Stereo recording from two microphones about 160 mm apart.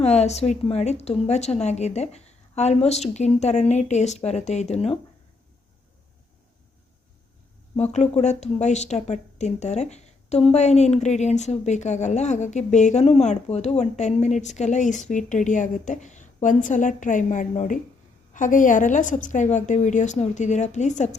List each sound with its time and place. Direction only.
0.0 s speech: 45° left (ahead or behind)
7.9 s speech: 45° left (ahead or behind)